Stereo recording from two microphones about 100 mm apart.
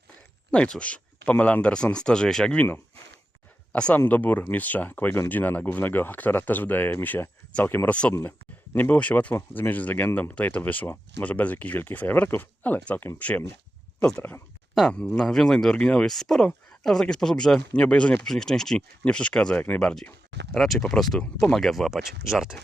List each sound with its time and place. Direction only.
0.5 s speech: 10° left (ahead or behind)
3.7 s speech: 15° left (ahead or behind); by 22.6 s 5° right (ahead or behind)